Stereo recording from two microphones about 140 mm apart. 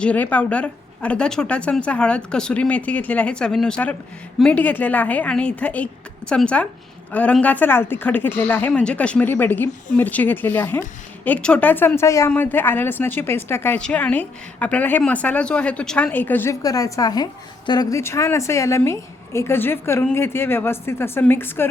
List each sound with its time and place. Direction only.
0.0 s a woman's voice: 10° left (ahead or behind)